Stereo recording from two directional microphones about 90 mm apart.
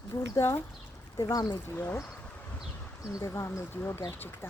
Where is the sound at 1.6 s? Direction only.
25° left (ahead or behind).